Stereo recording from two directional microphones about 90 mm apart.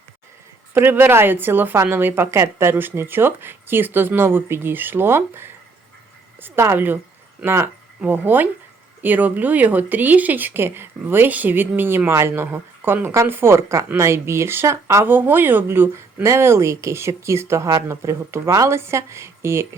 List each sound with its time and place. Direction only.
0.7 s a woman's voice: 25° right (ahead or behind)